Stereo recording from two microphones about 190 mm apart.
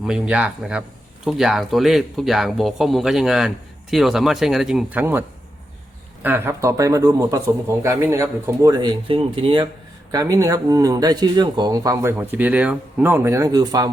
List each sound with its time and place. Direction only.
0.0 s speech: 5° right (ahead or behind)
6.2 s speech: 10° right (ahead or behind)